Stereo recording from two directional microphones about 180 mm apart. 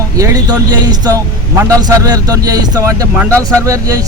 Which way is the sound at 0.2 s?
20° right (ahead or behind).